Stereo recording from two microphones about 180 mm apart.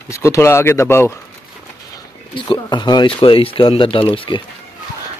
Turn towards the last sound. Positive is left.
turn(degrees=30)  # may be behind; listen again after turning